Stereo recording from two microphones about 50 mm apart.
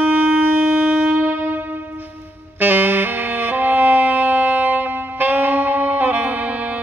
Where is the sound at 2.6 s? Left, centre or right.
Right.